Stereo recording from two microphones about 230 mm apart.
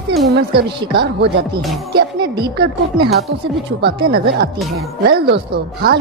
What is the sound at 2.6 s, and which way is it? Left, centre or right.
A woman's voice, right.